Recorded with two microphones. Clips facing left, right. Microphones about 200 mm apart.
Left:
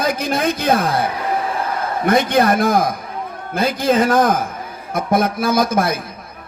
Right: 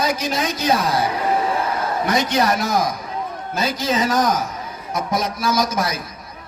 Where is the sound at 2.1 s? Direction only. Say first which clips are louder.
Left 6 dB; 55° left (ahead or behind).